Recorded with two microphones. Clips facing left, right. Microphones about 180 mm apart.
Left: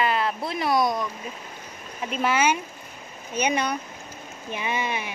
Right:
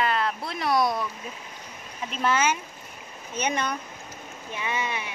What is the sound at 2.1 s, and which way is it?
Speech, 10° left (ahead or behind).